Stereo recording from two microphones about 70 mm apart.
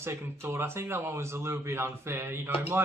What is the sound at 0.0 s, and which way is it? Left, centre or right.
A man's voice, right.